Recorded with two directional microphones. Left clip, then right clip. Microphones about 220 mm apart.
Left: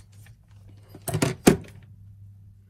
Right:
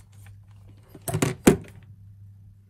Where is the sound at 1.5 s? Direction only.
30° right (ahead or behind).